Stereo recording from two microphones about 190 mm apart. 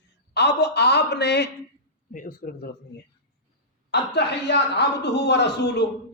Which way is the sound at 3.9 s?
60° left (ahead or behind).